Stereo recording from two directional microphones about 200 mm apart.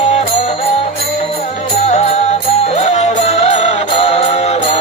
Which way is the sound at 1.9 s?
35° left (ahead or behind).